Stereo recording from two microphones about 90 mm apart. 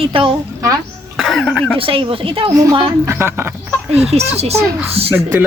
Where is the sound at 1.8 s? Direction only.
90° right.